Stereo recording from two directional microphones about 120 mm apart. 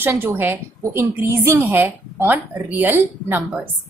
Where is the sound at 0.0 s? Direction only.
20° right (ahead or behind).